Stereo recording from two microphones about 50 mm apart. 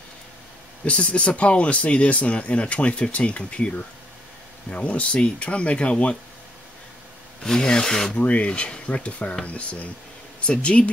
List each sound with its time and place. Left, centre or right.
0.8 s speech: left
7.4 s speech: centre
8.2 s speech: left